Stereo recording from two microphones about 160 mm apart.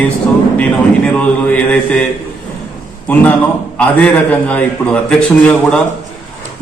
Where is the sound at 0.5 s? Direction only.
10° left (ahead or behind).